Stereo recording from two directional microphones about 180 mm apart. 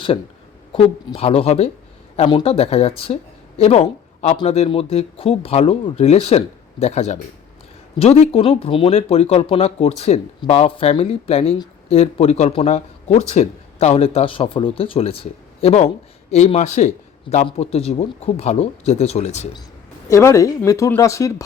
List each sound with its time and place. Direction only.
0.7 s speech: 30° left (ahead or behind)
20.1 s speech: 15° left (ahead or behind)